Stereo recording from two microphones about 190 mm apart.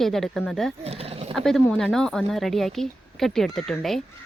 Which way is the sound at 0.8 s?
30° right (ahead or behind).